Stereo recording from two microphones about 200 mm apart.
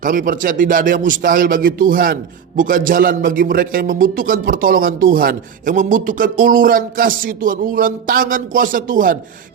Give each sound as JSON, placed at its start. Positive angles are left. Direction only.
{"t": 0.0, "sound": "speech", "side_deg": -40}